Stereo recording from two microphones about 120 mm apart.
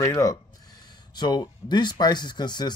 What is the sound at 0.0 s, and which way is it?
Speech, 30° left (ahead or behind).